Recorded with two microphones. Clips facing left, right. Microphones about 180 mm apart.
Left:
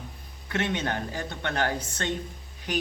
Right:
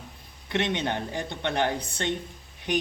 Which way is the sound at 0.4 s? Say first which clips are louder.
Right 1 dB; 15° right (ahead or behind).